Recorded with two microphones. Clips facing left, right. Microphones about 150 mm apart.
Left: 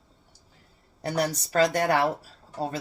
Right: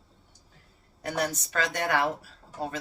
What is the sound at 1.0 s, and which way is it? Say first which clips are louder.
Speech: left 3 dB; 35° left (ahead or behind).